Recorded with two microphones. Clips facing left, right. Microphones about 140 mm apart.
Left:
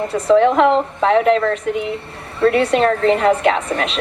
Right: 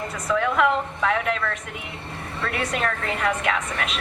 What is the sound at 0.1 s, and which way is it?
A woman's voice, 30° left (ahead or behind).